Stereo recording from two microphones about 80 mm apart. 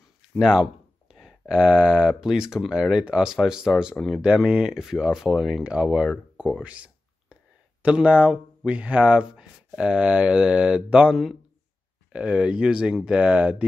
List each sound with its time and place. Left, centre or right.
0.4 s speech: centre
6.6 s a sound: centre
7.8 s speech: centre